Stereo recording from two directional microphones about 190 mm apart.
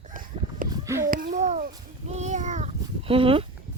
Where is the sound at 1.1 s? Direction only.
45° right (ahead or behind); by 3.4 s 30° right (ahead or behind).